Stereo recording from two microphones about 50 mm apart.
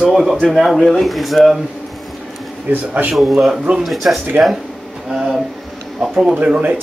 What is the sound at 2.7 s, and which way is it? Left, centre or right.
Speech, right.